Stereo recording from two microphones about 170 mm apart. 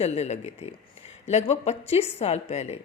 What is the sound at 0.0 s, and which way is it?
Speech, 40° left (ahead or behind).